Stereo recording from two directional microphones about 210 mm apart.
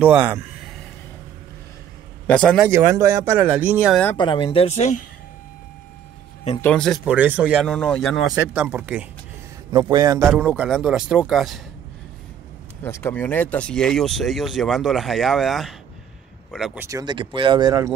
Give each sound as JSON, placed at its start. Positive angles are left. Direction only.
{"t": 0.0, "sound": "speech", "side_deg": -5}
{"t": 2.2, "sound": "speech", "side_deg": 5}
{"t": 2.7, "sound": "speech", "side_deg": -10}
{"t": 4.2, "sound": "speech", "side_deg": 25}
{"t": 6.6, "sound": "speech", "side_deg": 5}
{"t": 9.7, "sound": "speech", "side_deg": -20}
{"t": 10.2, "sound": "speech", "side_deg": -5}
{"t": 12.8, "sound": "speech", "side_deg": 10}
{"t": 16.8, "sound": "speech", "side_deg": -20}